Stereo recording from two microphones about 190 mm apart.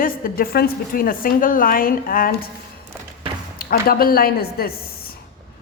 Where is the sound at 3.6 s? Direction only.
50° left (ahead or behind).